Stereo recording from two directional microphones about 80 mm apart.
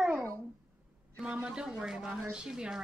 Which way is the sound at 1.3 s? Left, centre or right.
Centre.